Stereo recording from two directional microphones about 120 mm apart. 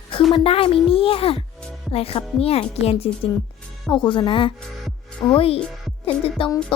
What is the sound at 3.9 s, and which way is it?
Speech, 40° left (ahead or behind).